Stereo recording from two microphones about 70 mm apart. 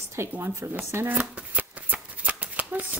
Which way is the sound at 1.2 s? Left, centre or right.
Right.